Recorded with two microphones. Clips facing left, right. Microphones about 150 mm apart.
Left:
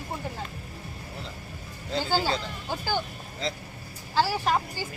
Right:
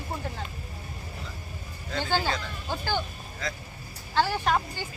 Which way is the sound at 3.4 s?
25° left (ahead or behind).